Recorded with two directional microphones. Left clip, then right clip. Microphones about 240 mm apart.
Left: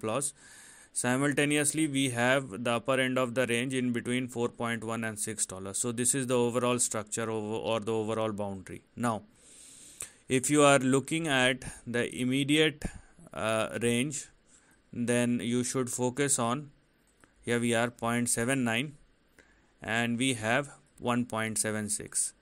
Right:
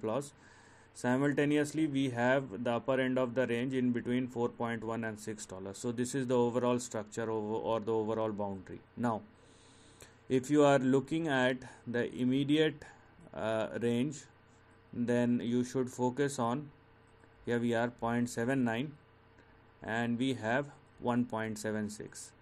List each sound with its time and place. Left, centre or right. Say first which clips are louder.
0.0 s speech: left 3 dB; left